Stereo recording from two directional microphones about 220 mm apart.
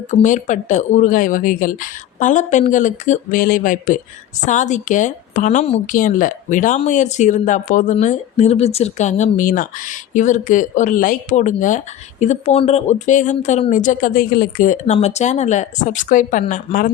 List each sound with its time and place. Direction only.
0.1 s a woman's voice: 35° left (ahead or behind)